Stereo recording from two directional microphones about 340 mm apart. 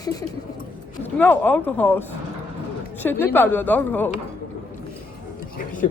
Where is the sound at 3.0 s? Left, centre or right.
Centre.